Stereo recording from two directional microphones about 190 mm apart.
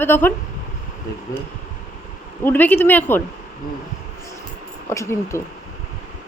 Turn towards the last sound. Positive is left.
turn(degrees=15)  # may be behind; listen again after turning